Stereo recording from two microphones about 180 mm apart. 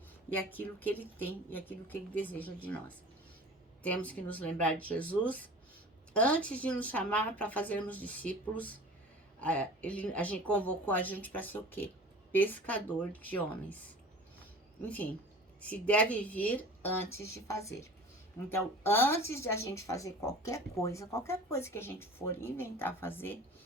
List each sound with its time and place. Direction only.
0.5 s speech: 10° left (ahead or behind)
14.8 s speech: 10° left (ahead or behind)